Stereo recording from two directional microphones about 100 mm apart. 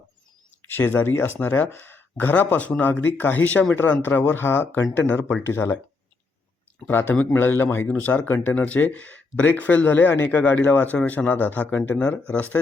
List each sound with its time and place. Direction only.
0.7 s speech: 20° left (ahead or behind)
6.8 s speech: 20° left (ahead or behind)